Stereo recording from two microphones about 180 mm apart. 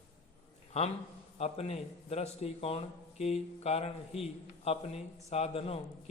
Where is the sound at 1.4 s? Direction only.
35° left (ahead or behind).